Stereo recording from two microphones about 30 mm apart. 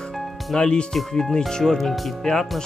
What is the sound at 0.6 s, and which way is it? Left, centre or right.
Speech, left.